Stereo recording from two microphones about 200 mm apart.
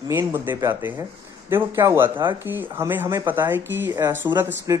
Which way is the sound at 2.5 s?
10° right (ahead or behind).